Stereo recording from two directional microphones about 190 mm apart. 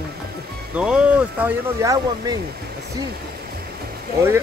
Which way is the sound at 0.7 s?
5° right (ahead or behind).